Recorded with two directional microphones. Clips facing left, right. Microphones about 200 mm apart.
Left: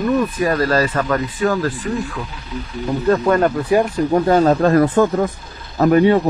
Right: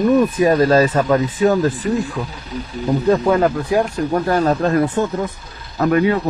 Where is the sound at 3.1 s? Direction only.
Centre (ahead or behind).